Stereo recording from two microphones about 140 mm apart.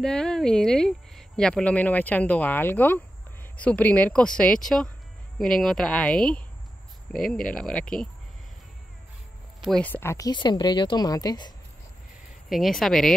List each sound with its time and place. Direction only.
0.0 s speech: 5° left (ahead or behind)
9.6 s a sound: centre (ahead or behind)
9.8 s speech: 15° left (ahead or behind)
12.4 s speech: centre (ahead or behind)